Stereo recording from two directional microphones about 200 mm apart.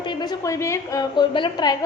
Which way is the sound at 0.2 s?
20° left (ahead or behind).